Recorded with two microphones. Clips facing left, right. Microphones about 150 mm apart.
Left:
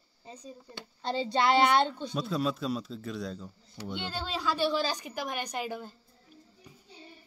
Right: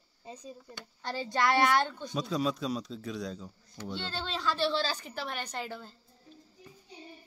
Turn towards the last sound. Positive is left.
turn(degrees=15)  # may be behind; listen again after turning